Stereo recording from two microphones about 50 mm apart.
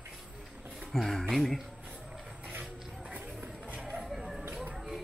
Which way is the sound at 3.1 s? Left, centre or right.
Right.